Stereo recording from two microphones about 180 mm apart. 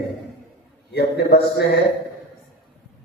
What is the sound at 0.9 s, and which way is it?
Speech, 65° left (ahead or behind).